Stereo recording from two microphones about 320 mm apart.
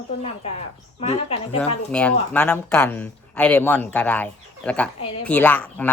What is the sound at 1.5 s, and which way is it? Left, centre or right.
Speech, centre.